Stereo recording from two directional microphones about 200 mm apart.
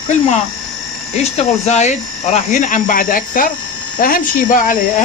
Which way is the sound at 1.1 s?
35° left (ahead or behind).